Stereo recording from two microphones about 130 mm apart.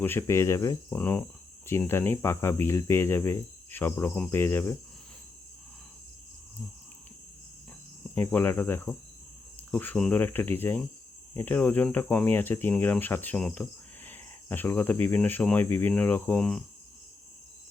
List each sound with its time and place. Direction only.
0.0 s speech: 20° left (ahead or behind)
8.1 s speech: 15° left (ahead or behind)